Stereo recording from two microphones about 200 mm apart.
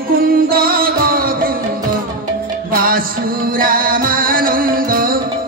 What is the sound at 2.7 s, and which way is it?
Music, 45° right (ahead or behind).